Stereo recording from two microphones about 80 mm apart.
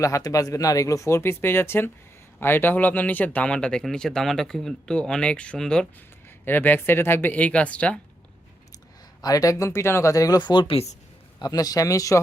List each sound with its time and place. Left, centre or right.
0.0 s speech: left; by 5.9 s centre
6.4 s speech: left
9.2 s speech: left
11.3 s speech: left